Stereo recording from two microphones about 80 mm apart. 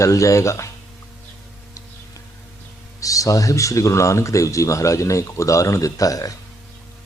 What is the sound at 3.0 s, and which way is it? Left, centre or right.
Speech, left.